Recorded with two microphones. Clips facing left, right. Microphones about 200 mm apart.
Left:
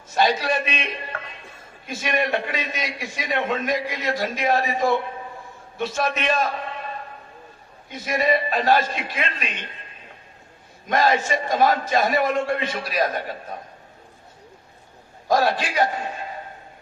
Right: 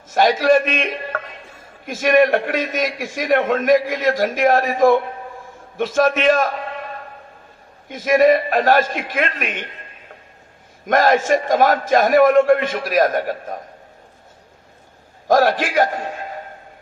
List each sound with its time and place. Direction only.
0.1 s a man's voice: 50° right (ahead or behind)
7.9 s a man's voice: 50° right (ahead or behind)
10.8 s a man's voice: 50° right (ahead or behind)
15.3 s a man's voice: 50° right (ahead or behind)